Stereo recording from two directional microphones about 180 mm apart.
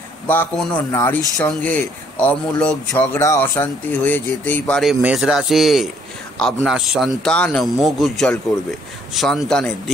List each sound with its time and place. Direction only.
0.3 s a man's voice: 10° left (ahead or behind)